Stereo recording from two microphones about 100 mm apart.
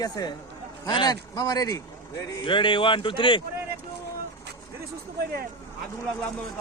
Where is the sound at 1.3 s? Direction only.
40° left (ahead or behind).